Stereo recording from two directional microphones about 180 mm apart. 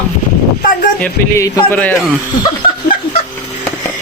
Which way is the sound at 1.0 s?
15° left (ahead or behind).